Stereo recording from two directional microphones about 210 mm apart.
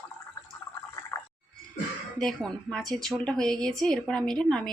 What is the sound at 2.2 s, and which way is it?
Speech, 5° left (ahead or behind).